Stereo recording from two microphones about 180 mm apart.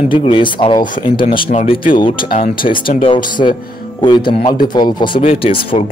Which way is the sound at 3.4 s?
30° left (ahead or behind).